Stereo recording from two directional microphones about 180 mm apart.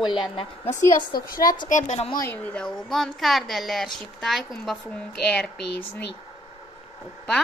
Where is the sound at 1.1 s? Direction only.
55° left (ahead or behind).